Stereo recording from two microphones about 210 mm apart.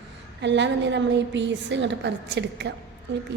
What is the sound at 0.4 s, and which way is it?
A woman's voice, 55° right (ahead or behind).